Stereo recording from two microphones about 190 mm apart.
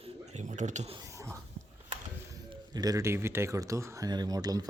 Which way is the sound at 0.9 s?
15° right (ahead or behind).